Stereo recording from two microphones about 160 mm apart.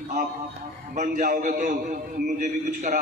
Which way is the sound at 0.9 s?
65° right (ahead or behind).